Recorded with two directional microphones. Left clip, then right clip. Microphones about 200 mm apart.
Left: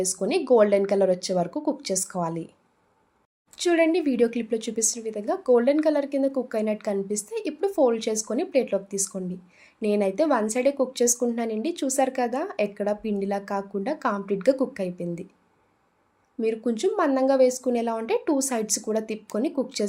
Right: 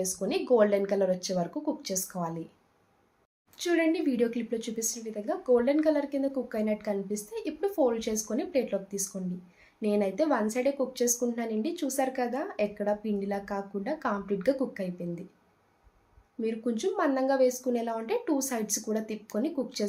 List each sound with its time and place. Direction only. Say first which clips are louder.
0.0 s a woman's voice: left 5 dB; 45° left (ahead or behind)
3.5 s a woman's voice: left 6 dB; 50° left (ahead or behind)
16.4 s a woman's voice: left 6 dB; 45° left (ahead or behind)